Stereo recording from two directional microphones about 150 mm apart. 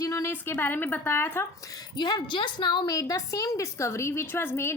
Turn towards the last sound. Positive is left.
turn(degrees=15)  # may be behind; listen again after turning